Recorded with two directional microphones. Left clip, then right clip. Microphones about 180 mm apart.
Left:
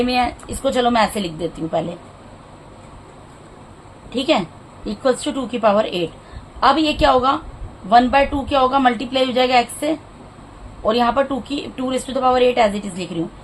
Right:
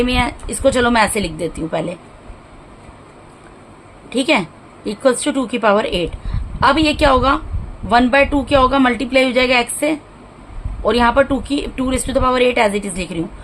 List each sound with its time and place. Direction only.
0.0 s a woman's voice: 35° right (ahead or behind)
4.1 s a woman's voice: 45° right (ahead or behind)